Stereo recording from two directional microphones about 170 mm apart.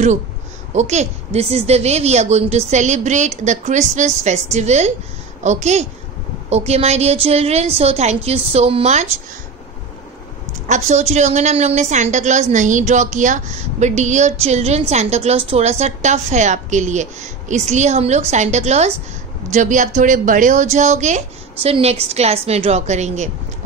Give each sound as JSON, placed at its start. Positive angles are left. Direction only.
{"t": 0.7, "sound": "a woman's voice", "side_deg": -40}
{"t": 10.7, "sound": "a woman's voice", "side_deg": -45}